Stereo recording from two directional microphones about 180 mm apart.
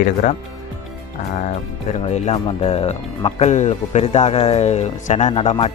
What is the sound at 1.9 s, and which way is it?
Speech, 40° left (ahead or behind).